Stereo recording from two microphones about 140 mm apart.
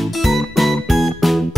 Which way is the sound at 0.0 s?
Centre (ahead or behind).